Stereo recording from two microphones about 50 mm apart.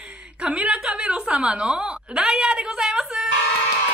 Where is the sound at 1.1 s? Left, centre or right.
Right.